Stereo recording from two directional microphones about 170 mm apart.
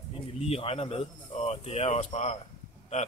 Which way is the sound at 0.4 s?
35° left (ahead or behind).